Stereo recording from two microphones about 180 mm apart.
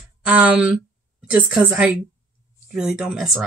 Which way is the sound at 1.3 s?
5° right (ahead or behind).